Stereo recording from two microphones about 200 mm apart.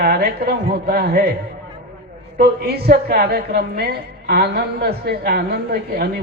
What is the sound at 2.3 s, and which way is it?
A woman's voice, 50° right (ahead or behind).